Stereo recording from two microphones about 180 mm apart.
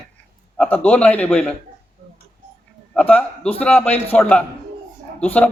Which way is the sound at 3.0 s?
5° left (ahead or behind).